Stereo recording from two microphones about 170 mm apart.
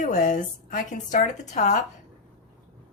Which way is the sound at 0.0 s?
45° left (ahead or behind).